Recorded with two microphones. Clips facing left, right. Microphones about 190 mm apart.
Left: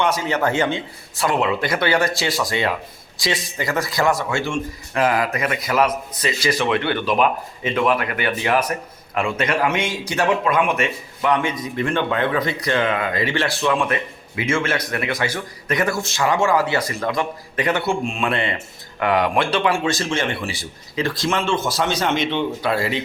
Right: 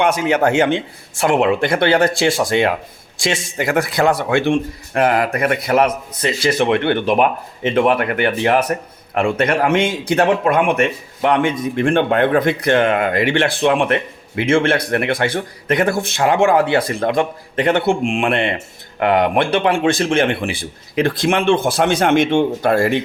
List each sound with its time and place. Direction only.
0.3 s speech: 50° right (ahead or behind)
17.7 s speech: 70° right (ahead or behind); by 23.0 s 50° right (ahead or behind)